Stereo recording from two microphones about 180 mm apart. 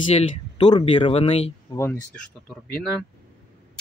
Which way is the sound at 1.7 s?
15° left (ahead or behind).